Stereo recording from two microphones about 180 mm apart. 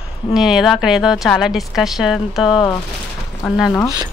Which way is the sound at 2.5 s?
25° left (ahead or behind).